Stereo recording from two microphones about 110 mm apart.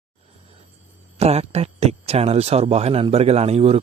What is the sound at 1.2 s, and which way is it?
Speech, 70° right (ahead or behind).